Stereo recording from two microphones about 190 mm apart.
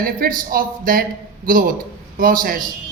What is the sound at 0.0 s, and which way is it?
A man's voice, 50° right (ahead or behind).